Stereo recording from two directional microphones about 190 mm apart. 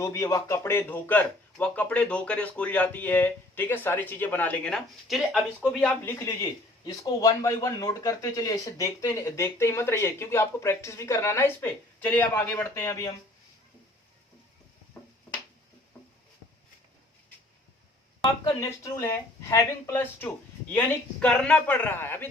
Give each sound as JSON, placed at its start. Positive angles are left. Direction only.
{"t": 0.0, "sound": "speech", "side_deg": 15}
{"t": 18.4, "sound": "speech", "side_deg": 15}